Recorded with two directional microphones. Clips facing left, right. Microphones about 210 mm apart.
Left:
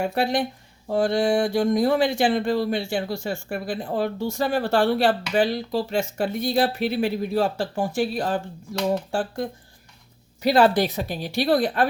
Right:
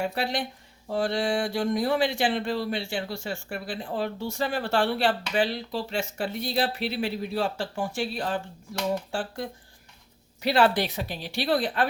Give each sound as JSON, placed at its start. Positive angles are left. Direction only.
{"t": 0.0, "sound": "speech", "side_deg": 50}